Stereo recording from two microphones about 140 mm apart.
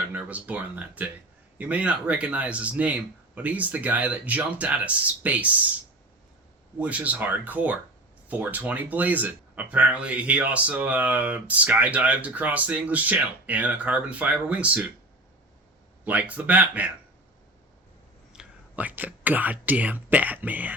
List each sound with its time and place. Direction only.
0.1 s speech: 10° right (ahead or behind)
6.7 s speech: 10° right (ahead or behind)
16.0 s speech: 10° right (ahead or behind)
18.3 s speech: 10° right (ahead or behind)